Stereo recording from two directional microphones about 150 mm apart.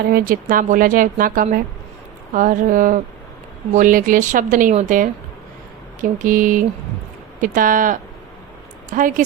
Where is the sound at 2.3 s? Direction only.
60° right (ahead or behind).